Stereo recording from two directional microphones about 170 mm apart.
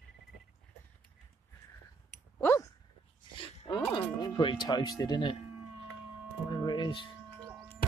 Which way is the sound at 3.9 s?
25° left (ahead or behind).